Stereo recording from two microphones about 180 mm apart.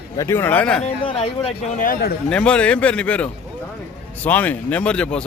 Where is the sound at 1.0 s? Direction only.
30° left (ahead or behind).